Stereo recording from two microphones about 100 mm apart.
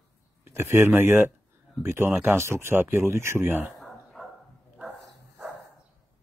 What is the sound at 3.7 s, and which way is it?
Bow-wow, centre (ahead or behind).